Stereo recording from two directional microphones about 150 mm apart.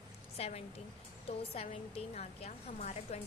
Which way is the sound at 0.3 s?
45° left (ahead or behind).